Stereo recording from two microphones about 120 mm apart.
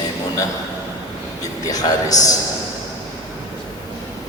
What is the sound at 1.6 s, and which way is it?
Speech, 30° left (ahead or behind).